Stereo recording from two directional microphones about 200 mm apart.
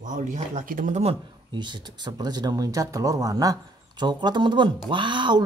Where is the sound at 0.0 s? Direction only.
40° right (ahead or behind).